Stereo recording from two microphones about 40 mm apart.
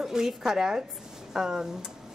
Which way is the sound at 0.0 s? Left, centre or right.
Centre.